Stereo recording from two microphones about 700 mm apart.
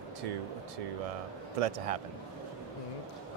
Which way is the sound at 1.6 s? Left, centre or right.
Right.